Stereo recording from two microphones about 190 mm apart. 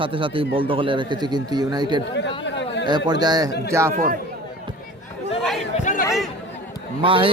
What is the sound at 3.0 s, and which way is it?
Speech, 20° right (ahead or behind).